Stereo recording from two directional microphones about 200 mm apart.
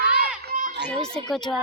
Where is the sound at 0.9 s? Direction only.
5° left (ahead or behind).